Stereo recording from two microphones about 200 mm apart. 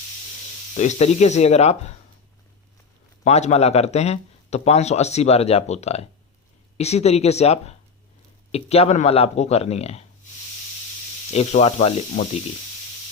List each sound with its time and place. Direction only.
0.7 s speech: 35° left (ahead or behind)
3.2 s speech: 35° left (ahead or behind)
11.3 s speech: 35° left (ahead or behind)